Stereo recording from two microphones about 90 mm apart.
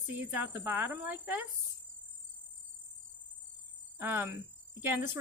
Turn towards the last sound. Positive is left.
turn(degrees=-25)  # may be behind; listen again after turning